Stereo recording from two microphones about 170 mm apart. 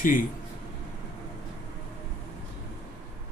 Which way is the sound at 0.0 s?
50° left (ahead or behind).